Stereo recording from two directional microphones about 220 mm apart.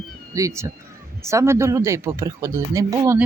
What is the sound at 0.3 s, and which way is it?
Speech, 15° right (ahead or behind).